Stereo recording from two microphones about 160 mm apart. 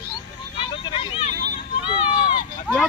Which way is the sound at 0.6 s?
35° left (ahead or behind).